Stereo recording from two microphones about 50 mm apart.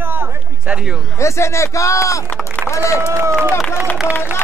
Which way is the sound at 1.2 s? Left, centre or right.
Left.